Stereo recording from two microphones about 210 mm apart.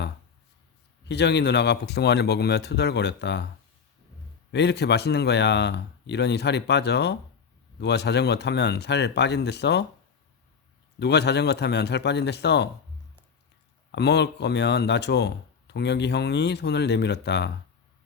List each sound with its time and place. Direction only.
1.0 s speech: 55° left (ahead or behind)
4.5 s speech: 55° left (ahead or behind)
11.0 s speech: 55° left (ahead or behind)
13.9 s speech: 55° left (ahead or behind)